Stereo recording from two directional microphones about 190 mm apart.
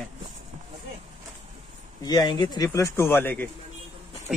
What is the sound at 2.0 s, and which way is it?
Speech, 20° left (ahead or behind).